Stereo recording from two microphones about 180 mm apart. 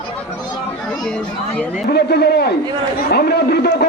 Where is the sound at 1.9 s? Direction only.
60° left (ahead or behind).